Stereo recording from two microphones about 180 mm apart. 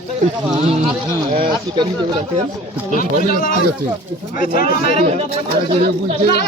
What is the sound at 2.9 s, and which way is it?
Speech, 50° left (ahead or behind).